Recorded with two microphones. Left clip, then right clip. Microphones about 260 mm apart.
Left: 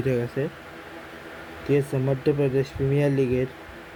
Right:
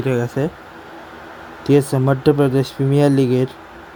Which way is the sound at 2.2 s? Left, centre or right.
Right.